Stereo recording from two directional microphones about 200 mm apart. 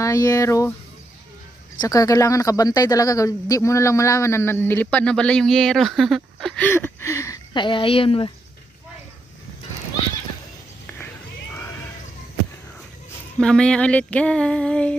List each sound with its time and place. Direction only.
0.0 s speech: 15° left (ahead or behind)
1.8 s speech: 15° left (ahead or behind)
13.4 s a sound: 5° left (ahead or behind)